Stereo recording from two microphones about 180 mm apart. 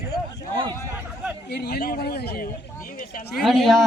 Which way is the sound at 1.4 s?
65° left (ahead or behind).